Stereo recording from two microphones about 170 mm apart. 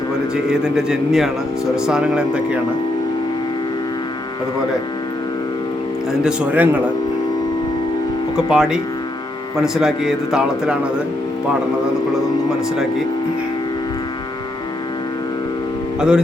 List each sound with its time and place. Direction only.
0.5 s a man's voice: 5° right (ahead or behind)
6.2 s a man's voice: 5° right (ahead or behind)
8.4 s a man's voice: 5° right (ahead or behind)
16.0 s speech: 5° right (ahead or behind)